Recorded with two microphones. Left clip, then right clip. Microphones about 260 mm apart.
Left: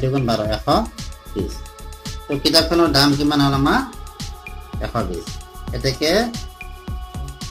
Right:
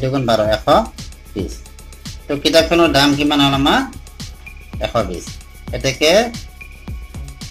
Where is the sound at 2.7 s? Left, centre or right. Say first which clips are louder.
Right 3 dB; centre.